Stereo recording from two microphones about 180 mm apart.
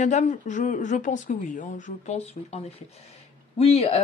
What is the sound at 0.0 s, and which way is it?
A woman's voice, 40° left (ahead or behind).